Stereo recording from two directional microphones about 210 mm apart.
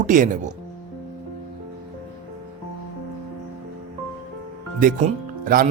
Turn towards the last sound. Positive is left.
turn(degrees=-40)  # may be behind; listen again after turning